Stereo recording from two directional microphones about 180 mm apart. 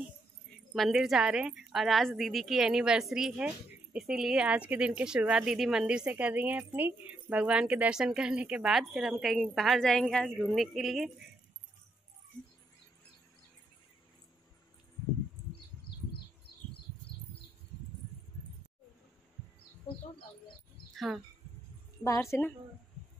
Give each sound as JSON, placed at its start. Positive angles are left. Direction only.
{"t": 0.7, "sound": "a woman's voice", "side_deg": 0}
{"t": 20.9, "sound": "speech", "side_deg": 0}
{"t": 22.0, "sound": "a woman's voice", "side_deg": 15}